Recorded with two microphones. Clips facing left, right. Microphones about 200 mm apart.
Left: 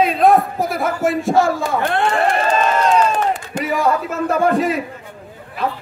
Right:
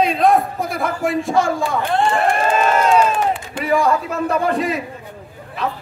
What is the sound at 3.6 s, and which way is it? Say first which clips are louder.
A man's voice: right 2 dB; centre (ahead or behind).